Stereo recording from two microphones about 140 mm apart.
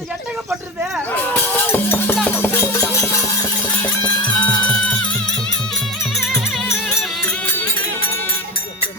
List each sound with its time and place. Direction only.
1.3 s cowbell: 15° left (ahead or behind)
2.1 s music: 10° left (ahead or behind)
4.0 s music: 30° left (ahead or behind)